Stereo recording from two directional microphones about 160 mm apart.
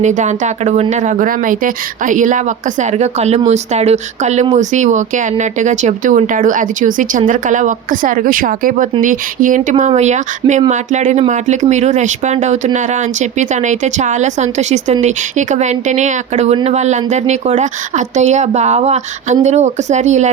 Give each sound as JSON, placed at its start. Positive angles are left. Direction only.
{"t": 0.0, "sound": "speech", "side_deg": -50}